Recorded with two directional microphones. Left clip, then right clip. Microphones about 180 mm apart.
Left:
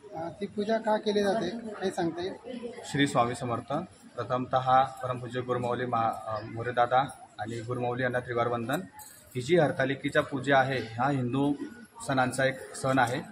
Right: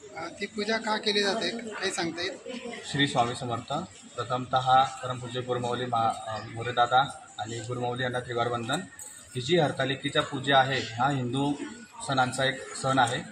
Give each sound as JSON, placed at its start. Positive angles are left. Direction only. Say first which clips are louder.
{"t": 0.4, "sound": "speech", "louder": "even", "side_deg": 35}
{"t": 3.0, "sound": "a man's voice", "louder": "even", "side_deg": 5}